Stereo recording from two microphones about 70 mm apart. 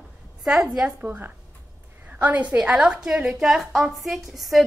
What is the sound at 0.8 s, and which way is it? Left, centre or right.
A woman's voice, right.